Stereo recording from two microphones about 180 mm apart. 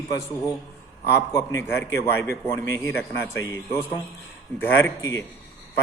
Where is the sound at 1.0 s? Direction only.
15° left (ahead or behind).